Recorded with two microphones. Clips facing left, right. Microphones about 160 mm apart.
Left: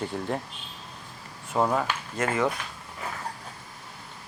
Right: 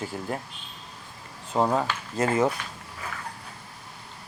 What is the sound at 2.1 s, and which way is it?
Speech, 35° right (ahead or behind).